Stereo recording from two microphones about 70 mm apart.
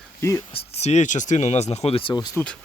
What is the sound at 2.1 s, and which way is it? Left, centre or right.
Speech, left.